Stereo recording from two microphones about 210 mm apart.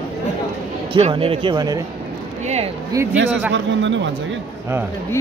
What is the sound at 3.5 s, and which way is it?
Speech, 60° right (ahead or behind).